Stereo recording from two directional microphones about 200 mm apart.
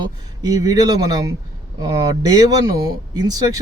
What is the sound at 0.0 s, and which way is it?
Speech, 20° right (ahead or behind).